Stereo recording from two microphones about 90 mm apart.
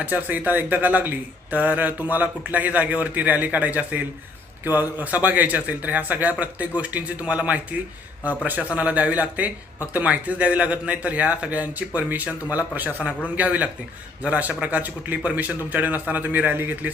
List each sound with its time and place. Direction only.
0.0 s a man's voice: 20° right (ahead or behind)